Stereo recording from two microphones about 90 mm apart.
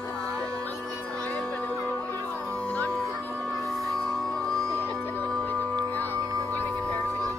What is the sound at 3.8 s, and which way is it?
Music, 5° left (ahead or behind).